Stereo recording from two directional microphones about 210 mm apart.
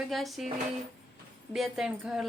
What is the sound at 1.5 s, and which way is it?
Speech, centre (ahead or behind).